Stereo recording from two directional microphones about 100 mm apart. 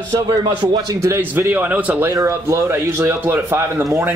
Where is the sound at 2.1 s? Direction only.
30° right (ahead or behind).